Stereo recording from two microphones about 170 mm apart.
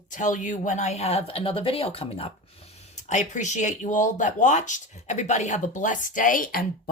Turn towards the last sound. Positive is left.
turn(degrees=55)  # may be behind; listen again after turning